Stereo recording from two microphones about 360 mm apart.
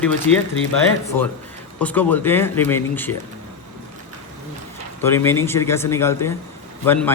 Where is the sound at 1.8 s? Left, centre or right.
Centre.